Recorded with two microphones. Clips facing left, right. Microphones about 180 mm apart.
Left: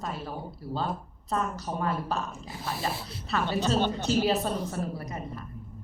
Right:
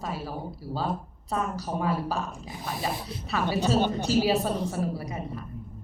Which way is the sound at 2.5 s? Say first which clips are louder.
Even; 15° right (ahead or behind).